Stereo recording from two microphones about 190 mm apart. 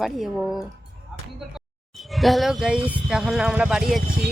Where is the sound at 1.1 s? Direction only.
Centre (ahead or behind).